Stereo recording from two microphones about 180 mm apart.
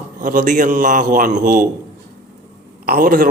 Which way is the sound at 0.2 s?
45° right (ahead or behind).